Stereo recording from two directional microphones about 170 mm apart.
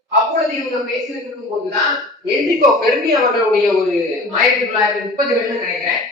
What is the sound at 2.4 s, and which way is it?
A man's voice, centre (ahead or behind).